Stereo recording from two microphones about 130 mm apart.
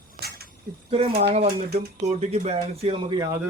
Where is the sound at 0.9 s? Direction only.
50° right (ahead or behind).